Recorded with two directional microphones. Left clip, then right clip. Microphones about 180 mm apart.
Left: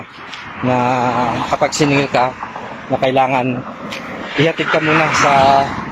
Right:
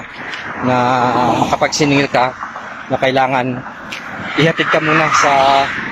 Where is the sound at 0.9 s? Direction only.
25° right (ahead or behind).